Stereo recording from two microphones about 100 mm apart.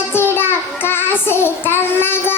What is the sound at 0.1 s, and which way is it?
Child singing, 25° left (ahead or behind).